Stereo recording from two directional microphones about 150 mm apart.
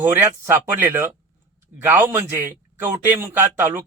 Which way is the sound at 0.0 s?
10° right (ahead or behind).